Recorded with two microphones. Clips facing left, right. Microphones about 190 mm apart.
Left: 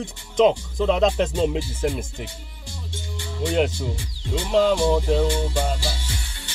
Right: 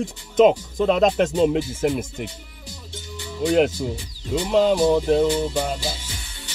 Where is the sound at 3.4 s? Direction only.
5° right (ahead or behind).